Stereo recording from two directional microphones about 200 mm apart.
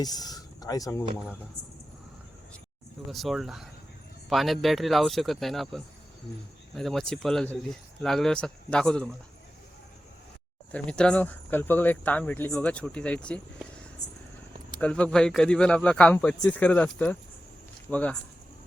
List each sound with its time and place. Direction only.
0.0 s speech: 20° left (ahead or behind)
3.1 s speech: centre (ahead or behind)
10.7 s speech: 5° left (ahead or behind)
14.8 s speech: 5° left (ahead or behind)